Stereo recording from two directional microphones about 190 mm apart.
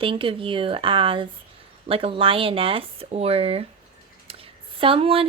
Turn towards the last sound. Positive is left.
turn(degrees=-30)  # may be behind; listen again after turning